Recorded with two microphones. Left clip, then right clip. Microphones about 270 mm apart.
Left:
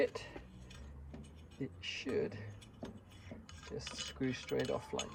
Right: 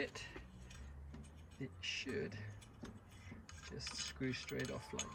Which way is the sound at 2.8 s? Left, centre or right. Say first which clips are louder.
Left 6 dB; centre.